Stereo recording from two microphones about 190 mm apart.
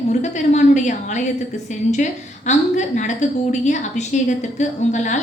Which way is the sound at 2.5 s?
40° left (ahead or behind).